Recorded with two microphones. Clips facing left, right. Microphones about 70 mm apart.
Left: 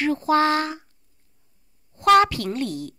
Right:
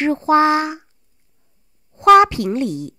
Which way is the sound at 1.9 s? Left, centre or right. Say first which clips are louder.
Right 6 dB; centre.